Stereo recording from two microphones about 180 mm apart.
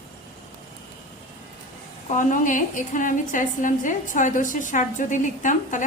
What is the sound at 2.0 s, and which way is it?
A woman's voice, 45° left (ahead or behind).